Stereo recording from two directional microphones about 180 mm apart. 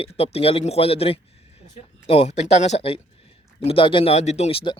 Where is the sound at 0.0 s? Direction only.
35° left (ahead or behind).